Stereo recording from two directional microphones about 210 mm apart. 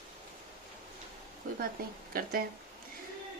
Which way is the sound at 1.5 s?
40° right (ahead or behind).